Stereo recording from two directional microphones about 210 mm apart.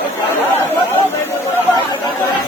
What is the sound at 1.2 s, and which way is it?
Chatter, 10° left (ahead or behind).